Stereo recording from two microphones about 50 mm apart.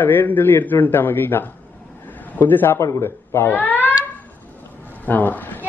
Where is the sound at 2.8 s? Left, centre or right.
Left.